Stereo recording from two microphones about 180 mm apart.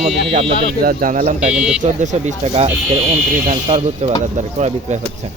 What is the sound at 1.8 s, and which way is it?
Speech, 40° right (ahead or behind).